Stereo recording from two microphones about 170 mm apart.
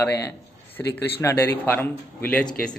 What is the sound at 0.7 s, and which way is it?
Speech, 15° left (ahead or behind).